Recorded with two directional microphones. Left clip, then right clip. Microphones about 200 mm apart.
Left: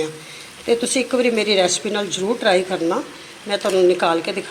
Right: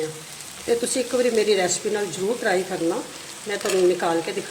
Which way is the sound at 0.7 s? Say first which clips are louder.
Left 4 dB; centre (ahead or behind).